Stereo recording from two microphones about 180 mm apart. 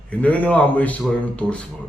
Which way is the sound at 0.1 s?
5° left (ahead or behind).